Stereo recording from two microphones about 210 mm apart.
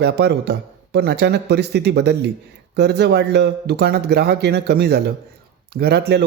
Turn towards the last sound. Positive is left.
turn(degrees=-50)  # may be behind; listen again after turning